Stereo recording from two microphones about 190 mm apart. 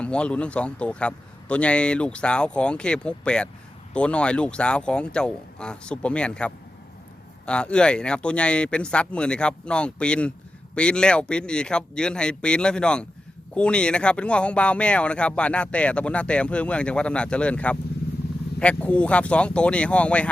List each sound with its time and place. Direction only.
0.0 s speech: 5° left (ahead or behind)